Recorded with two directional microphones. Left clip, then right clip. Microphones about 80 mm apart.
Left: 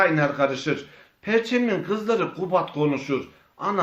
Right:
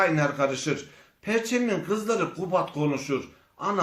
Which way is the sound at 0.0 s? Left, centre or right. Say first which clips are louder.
Left 3 dB; left.